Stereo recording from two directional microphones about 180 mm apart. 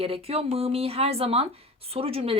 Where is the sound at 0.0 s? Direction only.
30° right (ahead or behind).